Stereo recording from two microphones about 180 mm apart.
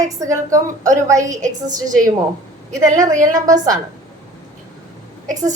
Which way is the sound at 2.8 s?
20° right (ahead or behind).